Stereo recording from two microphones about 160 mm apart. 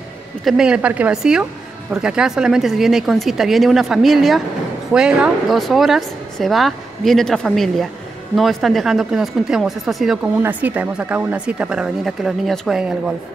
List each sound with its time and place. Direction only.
0.5 s speech: 5° right (ahead or behind)